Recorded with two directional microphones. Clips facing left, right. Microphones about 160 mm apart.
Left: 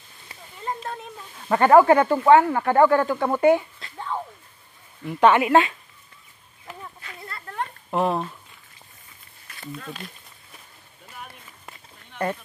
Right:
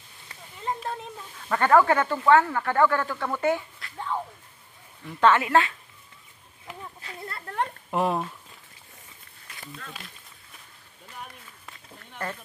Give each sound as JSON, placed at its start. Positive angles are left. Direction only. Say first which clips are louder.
{"t": 1.5, "sound": "speech", "louder": "left 5 dB", "side_deg": 20}
{"t": 5.0, "sound": "speech", "louder": "left 4 dB", "side_deg": 15}
{"t": 7.0, "sound": "a sound", "louder": "right 1 dB", "side_deg": -30}
{"t": 7.9, "sound": "speech", "louder": "left 3 dB", "side_deg": -5}